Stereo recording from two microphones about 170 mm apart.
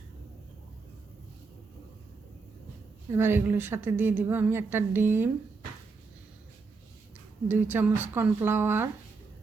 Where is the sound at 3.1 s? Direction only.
15° right (ahead or behind).